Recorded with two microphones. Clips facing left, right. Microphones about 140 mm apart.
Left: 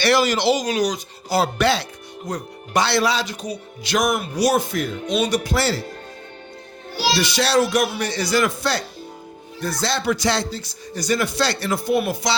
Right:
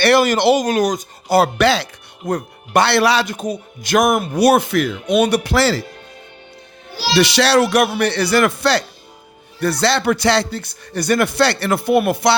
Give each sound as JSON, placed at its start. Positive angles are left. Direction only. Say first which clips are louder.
{"t": 0.0, "sound": "speech", "louder": "right 5 dB", "side_deg": -55}
{"t": 2.2, "sound": "speech", "louder": "right 7 dB", "side_deg": -55}
{"t": 7.1, "sound": "speech", "louder": "right 6 dB", "side_deg": -80}